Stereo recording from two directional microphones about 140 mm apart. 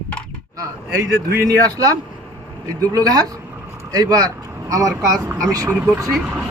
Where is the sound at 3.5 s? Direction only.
20° right (ahead or behind).